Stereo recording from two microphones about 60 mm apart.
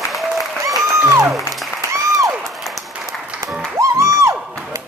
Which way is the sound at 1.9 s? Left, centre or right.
Right.